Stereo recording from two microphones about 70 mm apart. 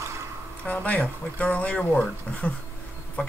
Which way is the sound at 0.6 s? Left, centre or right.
Left.